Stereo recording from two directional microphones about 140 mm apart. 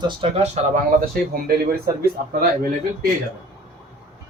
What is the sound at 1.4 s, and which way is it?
Speech, 90° right.